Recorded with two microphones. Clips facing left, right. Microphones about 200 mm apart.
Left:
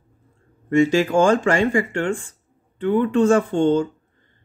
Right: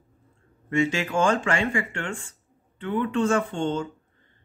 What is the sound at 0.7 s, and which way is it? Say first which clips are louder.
Speech: left 8 dB; 40° left (ahead or behind).